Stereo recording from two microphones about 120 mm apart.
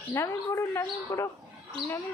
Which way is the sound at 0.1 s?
25° left (ahead or behind).